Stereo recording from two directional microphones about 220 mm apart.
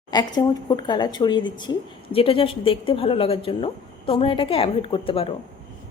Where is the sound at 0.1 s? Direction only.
20° left (ahead or behind).